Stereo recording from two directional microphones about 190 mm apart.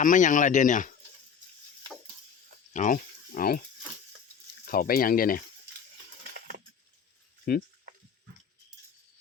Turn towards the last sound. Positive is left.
turn(degrees=50)  # may be behind; listen again after turning